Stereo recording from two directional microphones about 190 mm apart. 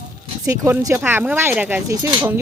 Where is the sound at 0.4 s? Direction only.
15° right (ahead or behind).